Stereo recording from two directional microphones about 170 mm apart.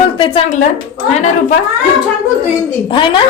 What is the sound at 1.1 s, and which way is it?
Speech, 45° left (ahead or behind).